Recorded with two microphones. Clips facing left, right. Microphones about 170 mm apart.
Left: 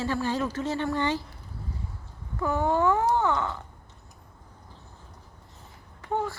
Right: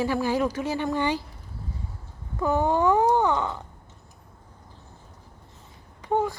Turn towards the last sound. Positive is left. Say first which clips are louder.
# right 5 dB
turn(degrees=-15)  # may be behind; listen again after turning